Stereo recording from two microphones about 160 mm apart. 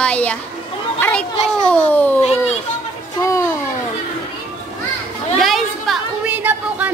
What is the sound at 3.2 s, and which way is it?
Music, 20° left (ahead or behind).